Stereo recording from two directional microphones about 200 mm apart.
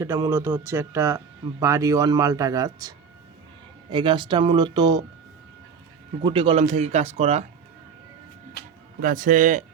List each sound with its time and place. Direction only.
0.0 s speech: 15° right (ahead or behind)
3.9 s speech: 25° right (ahead or behind)
6.2 s speech: 25° right (ahead or behind)
8.6 s music: 50° left (ahead or behind)
9.0 s speech: 45° right (ahead or behind)